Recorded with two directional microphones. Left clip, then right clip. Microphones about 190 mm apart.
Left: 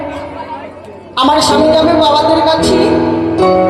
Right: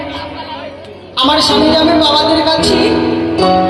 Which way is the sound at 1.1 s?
50° left (ahead or behind).